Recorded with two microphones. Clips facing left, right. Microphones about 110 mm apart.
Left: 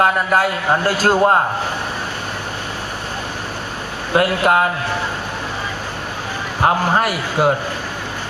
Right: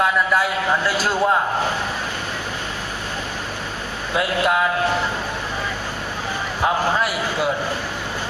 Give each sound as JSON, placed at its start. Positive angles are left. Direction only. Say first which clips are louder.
{"t": 0.0, "sound": "a man's voice", "louder": "left 3 dB", "side_deg": 50}
{"t": 4.1, "sound": "a man's voice", "louder": "left 5 dB", "side_deg": 55}
{"t": 6.6, "sound": "a man's voice", "louder": "left 4 dB", "side_deg": 55}